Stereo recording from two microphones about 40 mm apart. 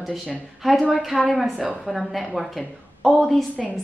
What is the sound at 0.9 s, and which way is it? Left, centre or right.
A woman's voice, centre.